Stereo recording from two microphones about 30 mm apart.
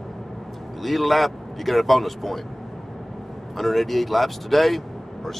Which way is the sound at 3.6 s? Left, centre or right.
Centre.